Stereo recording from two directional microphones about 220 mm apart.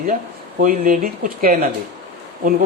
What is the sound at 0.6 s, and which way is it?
Speech, 40° right (ahead or behind).